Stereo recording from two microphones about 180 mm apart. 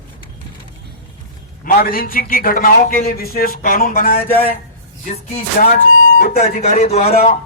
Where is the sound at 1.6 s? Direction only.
55° left (ahead or behind).